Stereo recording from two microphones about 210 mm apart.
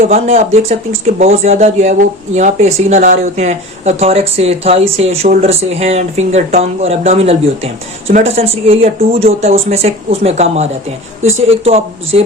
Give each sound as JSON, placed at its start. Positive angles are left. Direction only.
{"t": 0.0, "sound": "speech", "side_deg": -30}
{"t": 11.2, "sound": "a woman's voice", "side_deg": -70}
{"t": 11.4, "sound": "speech", "side_deg": -30}